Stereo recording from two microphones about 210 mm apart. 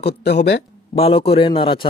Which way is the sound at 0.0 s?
50° left (ahead or behind).